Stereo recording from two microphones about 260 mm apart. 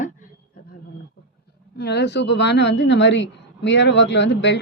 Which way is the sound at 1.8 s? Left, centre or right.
Left.